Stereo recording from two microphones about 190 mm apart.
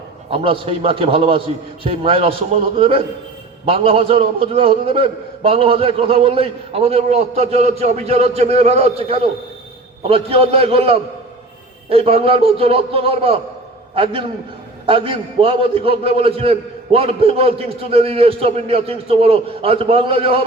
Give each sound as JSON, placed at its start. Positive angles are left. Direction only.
{"t": 0.3, "sound": "a man's voice", "side_deg": -30}